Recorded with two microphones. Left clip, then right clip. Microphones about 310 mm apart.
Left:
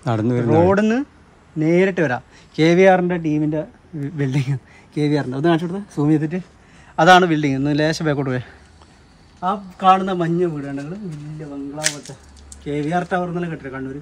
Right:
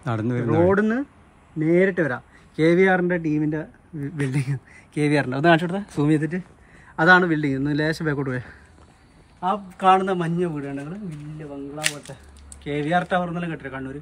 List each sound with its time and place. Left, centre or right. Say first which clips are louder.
0.0 s a man's voice: left 6 dB; centre
0.7 s speech: left 3 dB; left; by 5.2 s centre
5.2 s speech: right 1 dB; right
5.8 s a man's voice: left 3 dB; centre
7.0 s a man's voice: left 4 dB; centre
12.6 s a man's voice: left 1 dB; centre